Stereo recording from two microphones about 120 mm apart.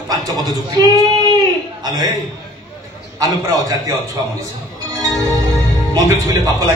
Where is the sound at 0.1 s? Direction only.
30° right (ahead or behind).